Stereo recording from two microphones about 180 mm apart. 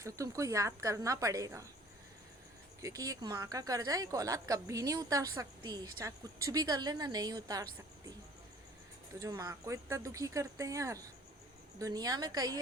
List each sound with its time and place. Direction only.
0.0 s speech: 15° right (ahead or behind)
2.8 s speech: 20° right (ahead or behind)
9.1 s speech: 20° right (ahead or behind)